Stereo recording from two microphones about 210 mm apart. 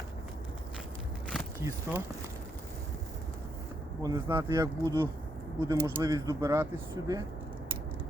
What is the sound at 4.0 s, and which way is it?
Speech, 15° right (ahead or behind).